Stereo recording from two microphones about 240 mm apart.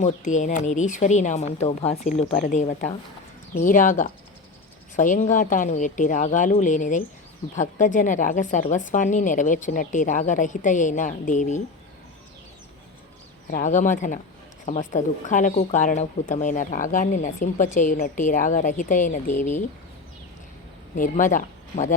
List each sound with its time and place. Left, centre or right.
0.0 s a woman's voice: left
13.5 s speech: left
20.9 s speech: left